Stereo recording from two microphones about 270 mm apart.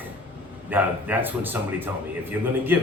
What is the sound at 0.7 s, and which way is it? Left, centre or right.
A man's voice, centre.